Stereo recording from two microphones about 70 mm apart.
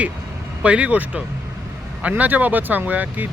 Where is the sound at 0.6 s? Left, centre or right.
Centre.